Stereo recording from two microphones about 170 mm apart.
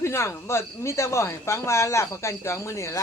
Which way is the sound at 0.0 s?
15° left (ahead or behind).